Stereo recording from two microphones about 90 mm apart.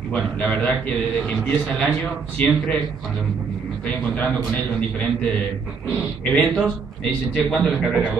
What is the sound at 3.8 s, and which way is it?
A man's voice, 20° left (ahead or behind).